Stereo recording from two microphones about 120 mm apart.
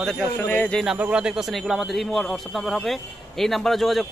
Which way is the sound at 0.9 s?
10° right (ahead or behind).